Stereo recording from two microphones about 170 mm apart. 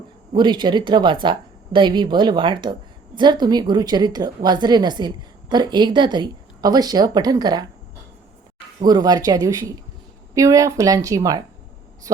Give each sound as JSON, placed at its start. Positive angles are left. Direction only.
{"t": 0.3, "sound": "a woman's voice", "side_deg": -25}
{"t": 8.8, "sound": "a woman's voice", "side_deg": -25}